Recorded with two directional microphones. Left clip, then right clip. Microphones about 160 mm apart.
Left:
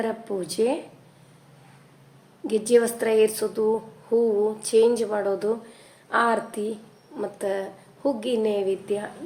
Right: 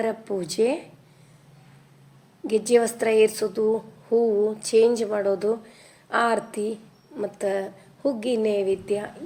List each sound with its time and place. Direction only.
0.0 s speech: 20° right (ahead or behind)
2.5 s a woman's voice: 20° right (ahead or behind)